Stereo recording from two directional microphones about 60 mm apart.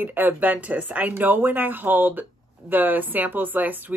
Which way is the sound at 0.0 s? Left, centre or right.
Right.